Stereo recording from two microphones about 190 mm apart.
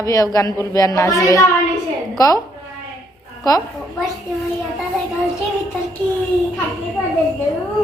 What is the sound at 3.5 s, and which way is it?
Speech, 20° left (ahead or behind).